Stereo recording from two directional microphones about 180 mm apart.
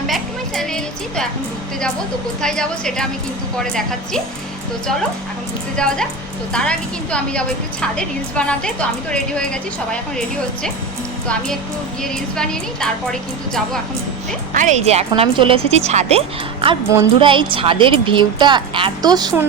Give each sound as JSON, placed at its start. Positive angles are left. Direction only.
{"t": 0.1, "sound": "music", "side_deg": 0}
{"t": 2.4, "sound": "a woman's voice", "side_deg": 5}
{"t": 5.7, "sound": "a woman's voice", "side_deg": 5}
{"t": 12.0, "sound": "a woman's voice", "side_deg": 5}
{"t": 14.5, "sound": "a woman's voice", "side_deg": -45}